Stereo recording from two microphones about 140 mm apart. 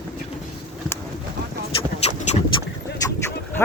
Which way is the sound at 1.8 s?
50° left (ahead or behind).